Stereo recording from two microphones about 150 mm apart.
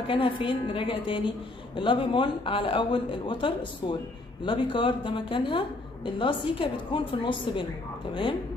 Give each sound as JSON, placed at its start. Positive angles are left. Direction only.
{"t": 0.0, "sound": "a woman's voice", "side_deg": 35}